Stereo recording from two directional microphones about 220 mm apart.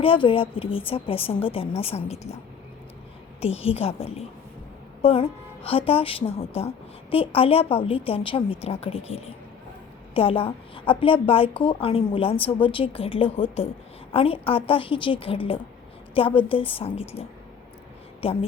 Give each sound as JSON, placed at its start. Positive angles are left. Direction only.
{"t": 0.0, "sound": "a woman's voice", "side_deg": 25}
{"t": 3.4, "sound": "a woman's voice", "side_deg": 25}
{"t": 18.2, "sound": "a woman's voice", "side_deg": 25}